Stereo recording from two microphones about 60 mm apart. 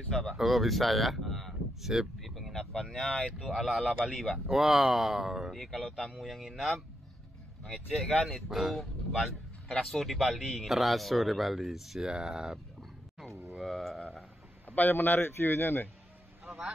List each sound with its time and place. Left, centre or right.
0.1 s speech: centre
13.3 s a sound: right
13.6 s speech: centre
14.8 s speech: left